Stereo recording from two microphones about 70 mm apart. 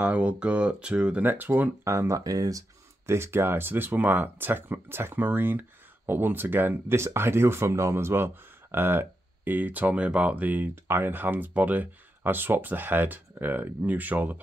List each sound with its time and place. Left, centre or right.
0.0 s speech: centre
1.2 s speech: right
1.9 s speech: right
3.1 s speech: right